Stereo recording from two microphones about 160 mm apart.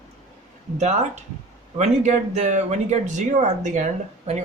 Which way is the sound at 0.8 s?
45° right (ahead or behind).